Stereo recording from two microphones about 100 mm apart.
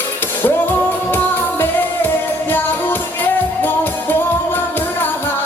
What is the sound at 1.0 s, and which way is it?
Music, 20° left (ahead or behind).